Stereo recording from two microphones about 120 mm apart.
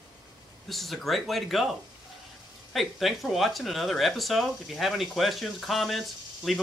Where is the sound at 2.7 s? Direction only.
Centre (ahead or behind).